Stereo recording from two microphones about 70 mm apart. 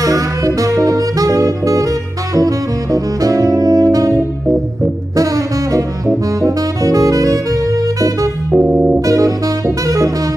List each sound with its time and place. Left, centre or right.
0.0 s music: right
5.1 s saxophone: right
8.5 s music: centre
9.0 s saxophone: right
9.8 s music: right